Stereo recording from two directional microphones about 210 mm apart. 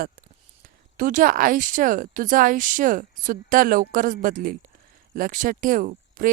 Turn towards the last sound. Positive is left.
turn(degrees=-40)  # may be behind; listen again after turning